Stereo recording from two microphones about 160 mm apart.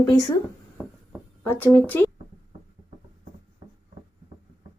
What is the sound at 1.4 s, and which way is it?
Speech, 10° left (ahead or behind).